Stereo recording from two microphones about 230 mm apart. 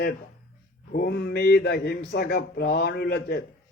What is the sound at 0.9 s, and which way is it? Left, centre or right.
Speech, left.